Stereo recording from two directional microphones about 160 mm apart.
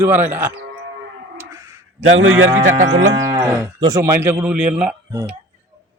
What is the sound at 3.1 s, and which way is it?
Moo, 20° right (ahead or behind).